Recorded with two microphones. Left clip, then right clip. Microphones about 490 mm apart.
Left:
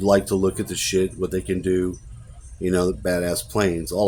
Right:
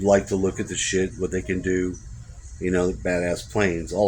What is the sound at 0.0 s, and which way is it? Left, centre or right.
Speech, left.